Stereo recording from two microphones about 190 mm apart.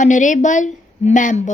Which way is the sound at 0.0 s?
40° left (ahead or behind).